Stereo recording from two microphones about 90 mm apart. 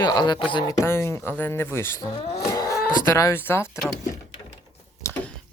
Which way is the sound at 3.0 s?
30° left (ahead or behind).